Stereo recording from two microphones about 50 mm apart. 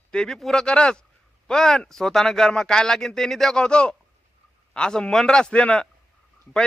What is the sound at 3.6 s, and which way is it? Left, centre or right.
A man's voice, centre.